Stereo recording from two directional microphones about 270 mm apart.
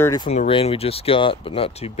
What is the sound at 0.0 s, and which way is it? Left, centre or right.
Speech, centre.